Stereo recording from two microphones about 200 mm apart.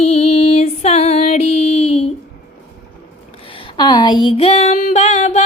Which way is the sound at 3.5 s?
25° left (ahead or behind).